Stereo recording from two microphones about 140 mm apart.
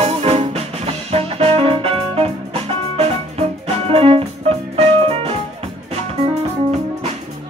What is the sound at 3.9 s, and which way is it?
Music, 45° right (ahead or behind).